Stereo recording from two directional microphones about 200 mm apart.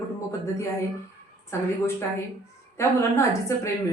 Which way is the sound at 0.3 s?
15° left (ahead or behind).